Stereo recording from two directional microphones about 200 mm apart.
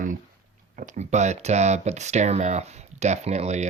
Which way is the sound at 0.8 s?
35° right (ahead or behind).